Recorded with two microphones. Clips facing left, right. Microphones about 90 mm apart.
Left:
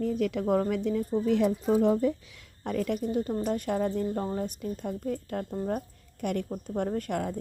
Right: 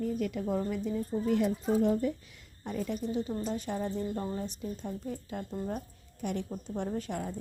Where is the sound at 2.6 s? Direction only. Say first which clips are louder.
Left 5 dB; 70° left (ahead or behind).